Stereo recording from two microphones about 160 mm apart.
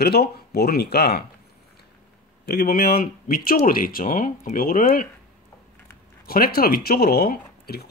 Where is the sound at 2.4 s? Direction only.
75° left (ahead or behind).